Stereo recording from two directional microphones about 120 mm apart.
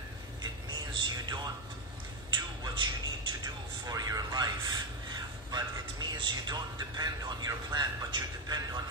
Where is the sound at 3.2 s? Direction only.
30° right (ahead or behind).